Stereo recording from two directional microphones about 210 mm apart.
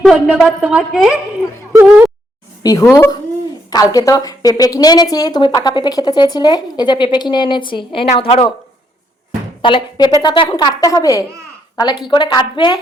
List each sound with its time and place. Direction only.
0.0 s a woman's voice: centre (ahead or behind)
2.6 s a woman's voice: 15° left (ahead or behind)
9.6 s a woman's voice: 25° left (ahead or behind)